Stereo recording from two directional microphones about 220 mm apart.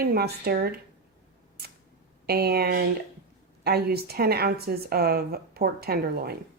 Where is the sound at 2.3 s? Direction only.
45° right (ahead or behind).